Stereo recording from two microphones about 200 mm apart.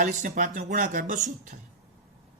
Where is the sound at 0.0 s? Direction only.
40° right (ahead or behind).